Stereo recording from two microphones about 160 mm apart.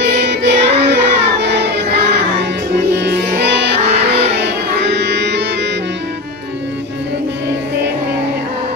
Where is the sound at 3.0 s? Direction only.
90° right.